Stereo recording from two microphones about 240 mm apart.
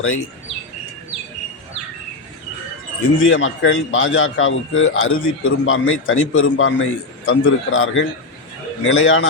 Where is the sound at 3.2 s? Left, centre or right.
Left.